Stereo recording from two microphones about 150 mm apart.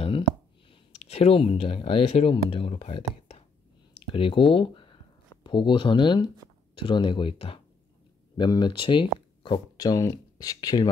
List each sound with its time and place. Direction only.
0.9 s speech: 45° left (ahead or behind); by 10.9 s 25° left (ahead or behind)